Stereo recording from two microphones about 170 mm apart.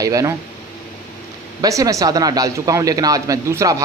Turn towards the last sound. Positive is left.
turn(degrees=-20)  # may be behind; listen again after turning